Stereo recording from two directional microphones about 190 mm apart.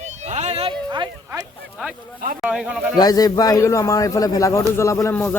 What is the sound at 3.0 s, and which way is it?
A man's voice, 20° left (ahead or behind).